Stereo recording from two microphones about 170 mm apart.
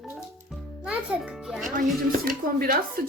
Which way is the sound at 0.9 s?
5° right (ahead or behind).